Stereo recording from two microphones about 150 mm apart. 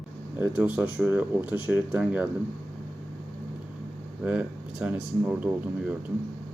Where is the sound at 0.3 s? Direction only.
10° right (ahead or behind).